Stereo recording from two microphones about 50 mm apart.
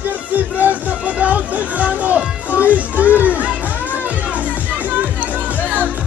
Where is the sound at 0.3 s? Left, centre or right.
Right.